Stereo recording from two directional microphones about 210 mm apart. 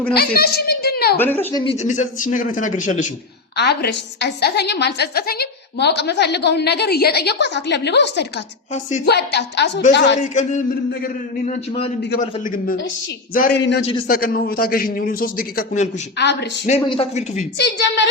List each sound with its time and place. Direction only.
0.1 s a woman's voice: 45° left (ahead or behind)
1.2 s speech: 10° left (ahead or behind)
1.6 s a man's voice: 30° left (ahead or behind)
3.6 s a woman's voice: 50° left (ahead or behind)
10.2 s a man's voice: 35° left (ahead or behind)
16.1 s a woman's voice: 55° left (ahead or behind)
16.8 s speech: 25° left (ahead or behind)
17.6 s a woman's voice: 55° left (ahead or behind)